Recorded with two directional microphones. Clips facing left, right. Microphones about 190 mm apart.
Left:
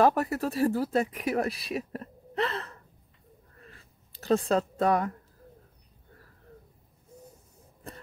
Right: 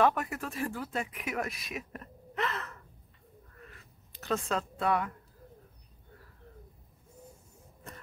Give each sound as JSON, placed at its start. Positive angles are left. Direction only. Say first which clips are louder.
{"t": 0.0, "sound": "speech", "louder": "left 4 dB", "side_deg": 35}
{"t": 4.1, "sound": "a woman's voice", "louder": "left 7 dB", "side_deg": 35}